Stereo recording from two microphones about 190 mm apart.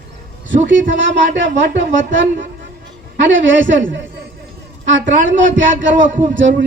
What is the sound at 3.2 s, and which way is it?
A woman's voice, 75° right (ahead or behind).